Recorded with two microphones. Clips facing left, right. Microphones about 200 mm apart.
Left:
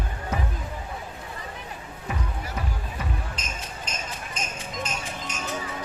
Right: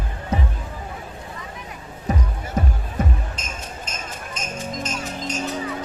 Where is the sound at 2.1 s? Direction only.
40° right (ahead or behind).